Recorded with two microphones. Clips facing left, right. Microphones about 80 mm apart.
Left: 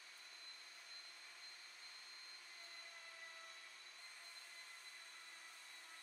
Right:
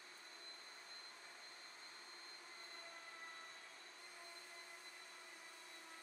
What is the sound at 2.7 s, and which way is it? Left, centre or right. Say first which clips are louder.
Vacuum cleaner: right 3 dB; right.